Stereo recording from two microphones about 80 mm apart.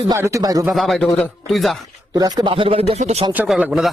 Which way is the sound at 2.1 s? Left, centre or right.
Right.